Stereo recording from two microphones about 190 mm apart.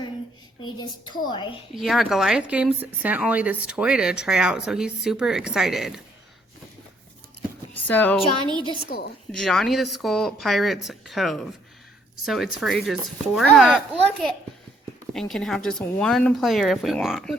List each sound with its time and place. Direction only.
0.8 s a woman's voice: 20° left (ahead or behind)
1.7 s speech: centre (ahead or behind)
7.7 s speech: 10° left (ahead or behind)
8.9 s a woman's voice: 55° left (ahead or behind)
9.4 s speech: centre (ahead or behind)